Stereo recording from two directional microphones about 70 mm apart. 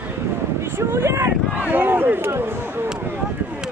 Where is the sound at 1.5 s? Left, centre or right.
Right.